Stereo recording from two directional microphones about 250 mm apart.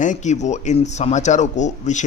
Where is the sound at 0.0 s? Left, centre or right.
Left.